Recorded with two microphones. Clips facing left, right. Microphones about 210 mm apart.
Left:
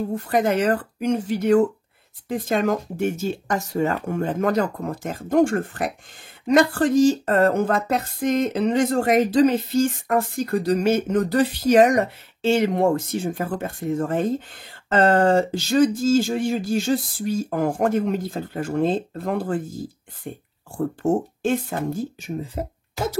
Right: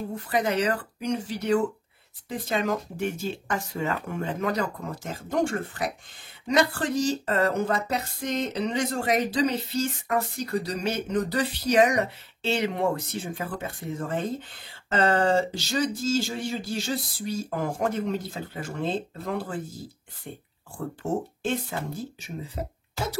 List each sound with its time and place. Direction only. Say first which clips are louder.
0.1 s speech: left 4 dB; 50° left (ahead or behind)